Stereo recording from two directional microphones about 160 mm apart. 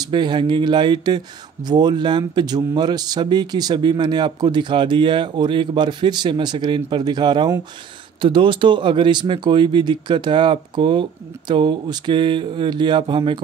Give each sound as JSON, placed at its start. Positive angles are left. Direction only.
{"t": 0.0, "sound": "speech", "side_deg": -30}